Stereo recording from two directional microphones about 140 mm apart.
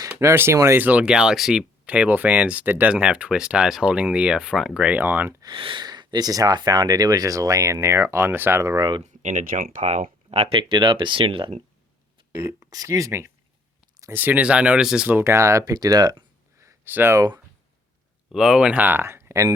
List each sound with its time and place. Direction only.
0.2 s speech: 20° right (ahead or behind)
5.4 s speech: 35° right (ahead or behind)
9.2 s speech: 75° right (ahead or behind)
10.3 s speech: 40° right (ahead or behind)
12.3 s speech: 25° right (ahead or behind); by 15.1 s 5° right (ahead or behind)
15.1 s speech: 20° right (ahead or behind)
18.3 s speech: 5° right (ahead or behind); by 19.5 s 25° right (ahead or behind)